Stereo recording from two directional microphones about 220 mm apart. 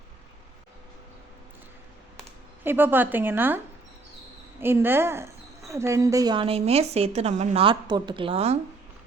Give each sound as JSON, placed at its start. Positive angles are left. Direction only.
{"t": 2.6, "sound": "a woman's voice", "side_deg": -10}
{"t": 4.6, "sound": "a woman's voice", "side_deg": -10}